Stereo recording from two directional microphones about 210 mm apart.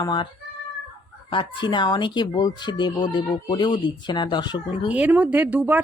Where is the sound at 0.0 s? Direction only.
20° left (ahead or behind).